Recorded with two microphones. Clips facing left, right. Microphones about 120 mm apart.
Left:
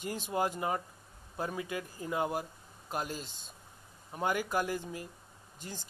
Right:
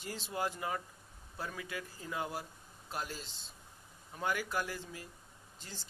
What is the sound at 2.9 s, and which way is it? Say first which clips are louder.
Speech: left 5 dB; 15° left (ahead or behind).